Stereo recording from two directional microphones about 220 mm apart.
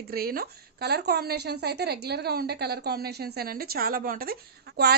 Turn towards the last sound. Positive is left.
turn(degrees=-45)  # may be behind; listen again after turning